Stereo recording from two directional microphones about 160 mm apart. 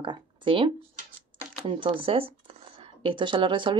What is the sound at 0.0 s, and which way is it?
Speech, 30° right (ahead or behind).